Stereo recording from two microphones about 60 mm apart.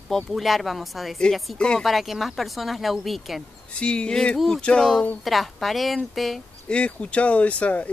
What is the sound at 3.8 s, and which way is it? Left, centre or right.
Speech, centre.